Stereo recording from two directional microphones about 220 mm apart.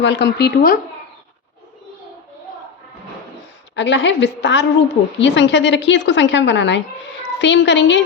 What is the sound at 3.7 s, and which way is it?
A woman's voice, 55° left (ahead or behind).